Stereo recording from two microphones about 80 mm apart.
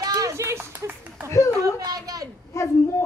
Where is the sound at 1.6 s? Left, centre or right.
Right.